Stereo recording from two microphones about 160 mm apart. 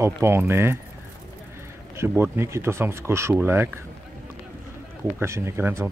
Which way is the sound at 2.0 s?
15° right (ahead or behind).